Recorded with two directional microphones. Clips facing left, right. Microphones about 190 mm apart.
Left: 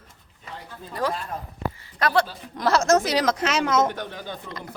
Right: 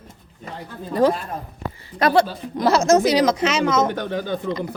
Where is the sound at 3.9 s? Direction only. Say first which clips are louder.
Right 9 dB; 90° right.